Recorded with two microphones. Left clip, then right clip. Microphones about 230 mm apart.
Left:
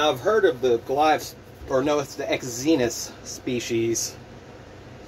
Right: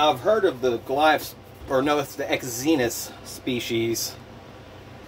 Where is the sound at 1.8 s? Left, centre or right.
Centre.